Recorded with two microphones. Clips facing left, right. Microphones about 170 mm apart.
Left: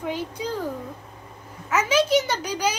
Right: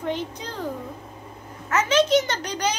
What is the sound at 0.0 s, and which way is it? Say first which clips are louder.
Speech: even; 10° left (ahead or behind).